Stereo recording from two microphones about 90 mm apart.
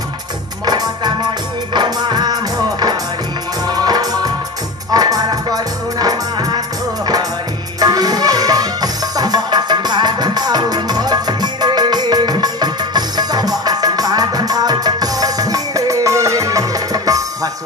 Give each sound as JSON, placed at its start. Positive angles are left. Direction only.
{"t": 0.7, "sound": "music", "side_deg": -50}
{"t": 3.6, "sound": "music", "side_deg": -50}
{"t": 7.8, "sound": "music", "side_deg": -45}